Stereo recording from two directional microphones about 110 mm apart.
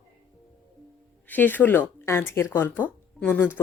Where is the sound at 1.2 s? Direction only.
15° left (ahead or behind).